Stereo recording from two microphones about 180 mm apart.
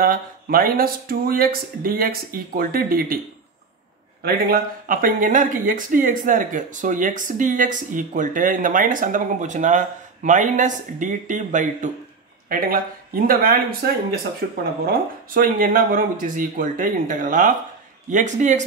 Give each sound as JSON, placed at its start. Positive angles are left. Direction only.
{"t": 0.0, "sound": "speech", "side_deg": -55}
{"t": 4.2, "sound": "speech", "side_deg": -55}